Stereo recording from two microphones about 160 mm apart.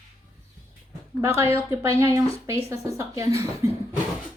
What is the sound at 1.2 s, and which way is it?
A woman's voice, 15° right (ahead or behind).